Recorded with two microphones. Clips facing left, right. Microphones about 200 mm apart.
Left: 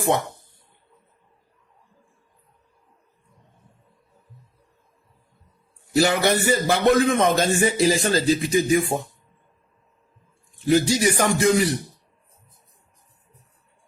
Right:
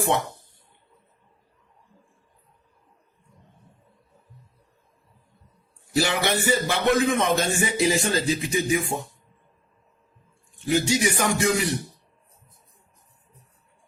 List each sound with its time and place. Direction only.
6.0 s a man's voice: 45° left (ahead or behind)
10.7 s a man's voice: 35° left (ahead or behind)